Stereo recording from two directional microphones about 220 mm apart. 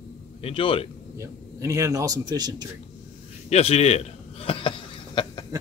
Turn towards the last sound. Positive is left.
turn(degrees=25)  # may be behind; listen again after turning